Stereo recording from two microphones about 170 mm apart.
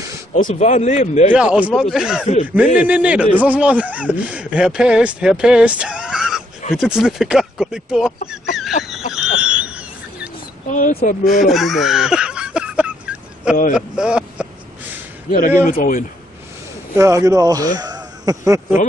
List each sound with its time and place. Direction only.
0.3 s a man's voice: 50° left (ahead or behind)
1.3 s a man's voice: 5° right (ahead or behind)
8.5 s a sound: centre (ahead or behind)
10.7 s a man's voice: 50° left (ahead or behind)
11.4 s a sound: centre (ahead or behind)
13.7 s speech: 5° right (ahead or behind)
15.6 s a man's voice: 55° left (ahead or behind)
16.9 s speech: 15° right (ahead or behind)